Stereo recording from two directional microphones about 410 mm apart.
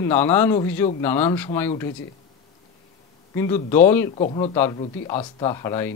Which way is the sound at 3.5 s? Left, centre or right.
Centre.